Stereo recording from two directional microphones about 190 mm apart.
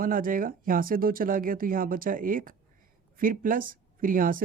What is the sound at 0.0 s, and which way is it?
Speech, 45° right (ahead or behind).